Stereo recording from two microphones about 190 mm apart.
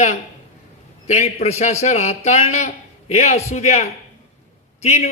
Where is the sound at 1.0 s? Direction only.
35° left (ahead or behind).